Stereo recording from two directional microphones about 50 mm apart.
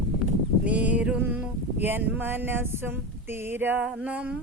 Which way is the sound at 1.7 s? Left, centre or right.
Right.